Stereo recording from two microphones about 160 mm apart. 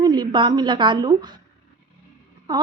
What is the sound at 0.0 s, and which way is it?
A woman's voice, 30° right (ahead or behind).